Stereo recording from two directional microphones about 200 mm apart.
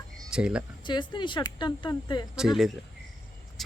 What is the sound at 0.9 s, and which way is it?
Speech, 25° left (ahead or behind).